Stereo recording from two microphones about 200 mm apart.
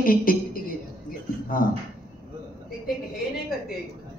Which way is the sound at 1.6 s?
45° left (ahead or behind).